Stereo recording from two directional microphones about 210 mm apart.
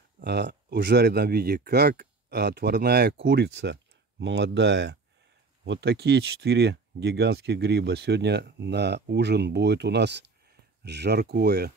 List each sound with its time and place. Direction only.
0.2 s speech: 50° right (ahead or behind)